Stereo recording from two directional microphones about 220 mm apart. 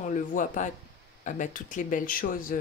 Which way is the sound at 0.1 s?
35° left (ahead or behind).